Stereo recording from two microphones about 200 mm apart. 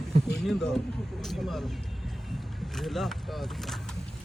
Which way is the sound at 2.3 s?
Centre (ahead or behind).